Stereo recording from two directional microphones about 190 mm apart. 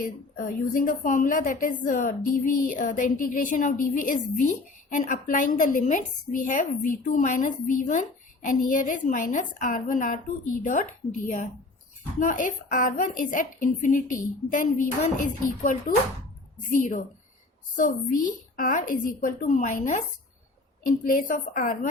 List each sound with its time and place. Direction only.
0.0 s a woman's voice: 45° left (ahead or behind)
21.0 s a woman's voice: 45° left (ahead or behind)